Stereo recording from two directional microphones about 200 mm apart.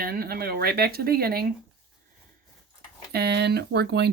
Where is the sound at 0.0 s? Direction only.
50° right (ahead or behind).